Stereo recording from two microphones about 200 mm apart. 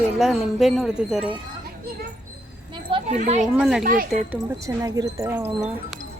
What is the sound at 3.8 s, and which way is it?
Speech, 45° right (ahead or behind).